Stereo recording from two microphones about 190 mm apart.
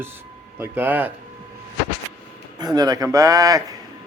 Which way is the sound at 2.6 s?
20° right (ahead or behind).